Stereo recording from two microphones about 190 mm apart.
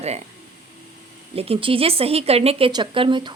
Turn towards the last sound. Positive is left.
turn(degrees=-25)  # may be behind; listen again after turning